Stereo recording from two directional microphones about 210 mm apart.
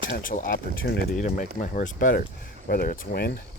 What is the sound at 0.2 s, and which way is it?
Speech, 40° left (ahead or behind).